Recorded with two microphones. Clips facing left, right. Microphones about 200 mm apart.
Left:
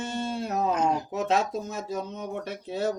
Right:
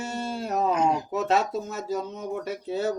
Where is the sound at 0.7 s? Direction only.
25° right (ahead or behind).